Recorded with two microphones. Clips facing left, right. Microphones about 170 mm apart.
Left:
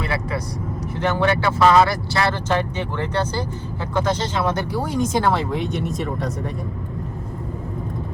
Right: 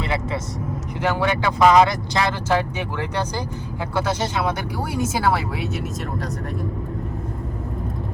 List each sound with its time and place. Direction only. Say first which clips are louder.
0.0 s vehicle: even; 25° right (ahead or behind)
1.0 s speech: left 1 dB; 10° right (ahead or behind)